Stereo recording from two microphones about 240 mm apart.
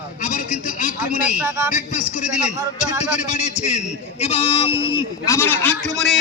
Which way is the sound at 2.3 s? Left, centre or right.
Centre.